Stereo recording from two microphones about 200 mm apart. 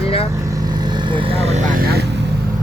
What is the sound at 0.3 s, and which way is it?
Vehicle, 15° right (ahead or behind).